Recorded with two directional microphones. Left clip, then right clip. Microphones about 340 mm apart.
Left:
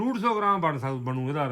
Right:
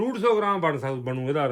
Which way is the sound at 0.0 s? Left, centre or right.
Centre.